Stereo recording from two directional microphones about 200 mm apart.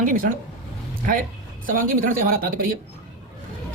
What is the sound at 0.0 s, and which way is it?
Speech, 40° right (ahead or behind).